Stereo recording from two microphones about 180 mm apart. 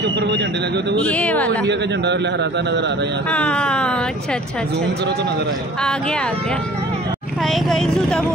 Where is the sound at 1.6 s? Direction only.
70° right (ahead or behind).